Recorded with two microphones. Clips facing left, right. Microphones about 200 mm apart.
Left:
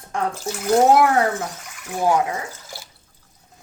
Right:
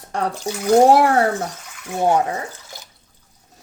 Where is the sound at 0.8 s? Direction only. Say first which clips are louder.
Right 2 dB; 35° right (ahead or behind).